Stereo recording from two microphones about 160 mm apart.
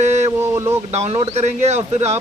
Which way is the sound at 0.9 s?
45° right (ahead or behind).